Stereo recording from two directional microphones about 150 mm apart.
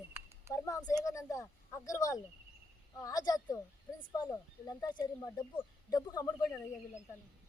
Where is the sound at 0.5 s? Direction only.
20° left (ahead or behind).